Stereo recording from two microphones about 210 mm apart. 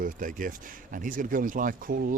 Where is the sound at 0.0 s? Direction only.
40° right (ahead or behind).